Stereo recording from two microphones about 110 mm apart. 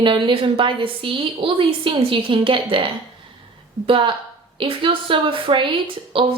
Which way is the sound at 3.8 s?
55° right (ahead or behind).